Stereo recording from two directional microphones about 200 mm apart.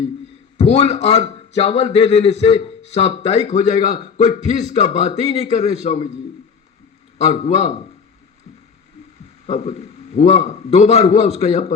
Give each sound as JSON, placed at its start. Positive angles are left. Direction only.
{"t": 0.6, "sound": "a man's voice", "side_deg": 30}
{"t": 7.2, "sound": "a man's voice", "side_deg": 30}
{"t": 9.5, "sound": "a man's voice", "side_deg": 30}